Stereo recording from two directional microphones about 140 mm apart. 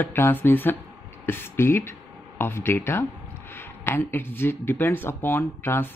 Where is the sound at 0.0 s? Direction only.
15° left (ahead or behind).